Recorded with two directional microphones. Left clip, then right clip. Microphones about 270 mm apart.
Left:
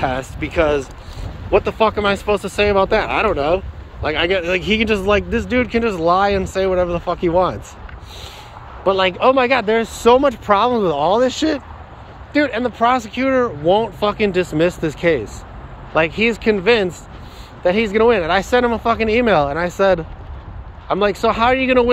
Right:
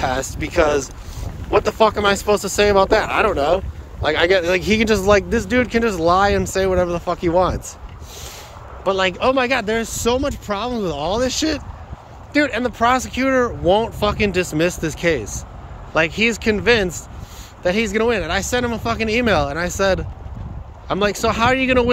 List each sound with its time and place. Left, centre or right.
0.0 s speech: centre
8.8 s speech: centre